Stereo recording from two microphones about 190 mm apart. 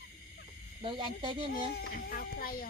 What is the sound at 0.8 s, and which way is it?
Speech, 25° right (ahead or behind).